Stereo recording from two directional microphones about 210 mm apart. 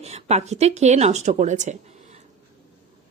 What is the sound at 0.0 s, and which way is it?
Speech, 30° right (ahead or behind).